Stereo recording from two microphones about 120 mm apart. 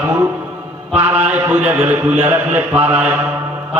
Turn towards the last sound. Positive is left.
turn(degrees=-20)  # may be behind; listen again after turning